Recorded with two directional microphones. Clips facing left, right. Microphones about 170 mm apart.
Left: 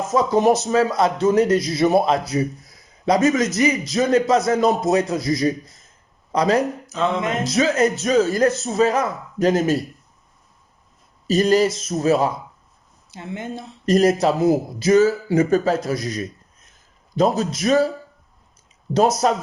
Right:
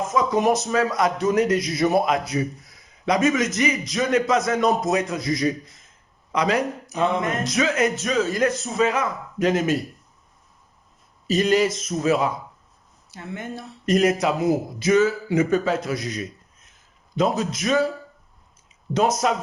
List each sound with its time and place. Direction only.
0.1 s a man's voice: 30° left (ahead or behind)
6.8 s a sound: 15° right (ahead or behind)
7.2 s speech: 20° left (ahead or behind)
7.5 s a man's voice: 35° left (ahead or behind)
11.3 s a man's voice: 35° left (ahead or behind)
13.1 s speech: 20° left (ahead or behind)
13.8 s a man's voice: 35° left (ahead or behind)
19.2 s a man's voice: 35° left (ahead or behind)